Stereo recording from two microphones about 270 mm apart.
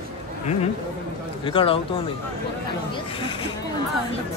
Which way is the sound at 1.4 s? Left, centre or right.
Centre.